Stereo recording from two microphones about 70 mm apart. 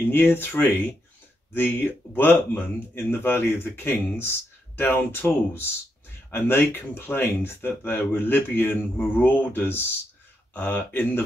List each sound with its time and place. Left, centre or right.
0.1 s speech: left